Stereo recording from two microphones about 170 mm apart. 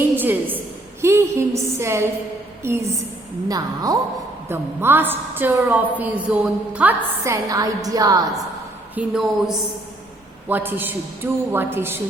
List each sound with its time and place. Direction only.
0.2 s a sound: 10° right (ahead or behind)
2.6 s a woman's voice: 15° right (ahead or behind)
7.5 s a woman's voice: 20° right (ahead or behind)
9.0 s a woman's voice: centre (ahead or behind)